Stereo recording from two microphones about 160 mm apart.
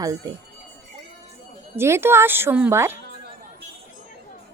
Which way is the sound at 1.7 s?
15° right (ahead or behind).